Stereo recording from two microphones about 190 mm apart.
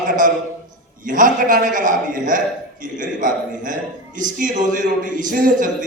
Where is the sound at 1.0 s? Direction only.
45° right (ahead or behind).